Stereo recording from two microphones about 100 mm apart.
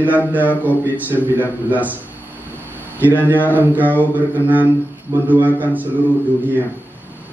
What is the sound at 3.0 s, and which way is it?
Speech, 20° right (ahead or behind).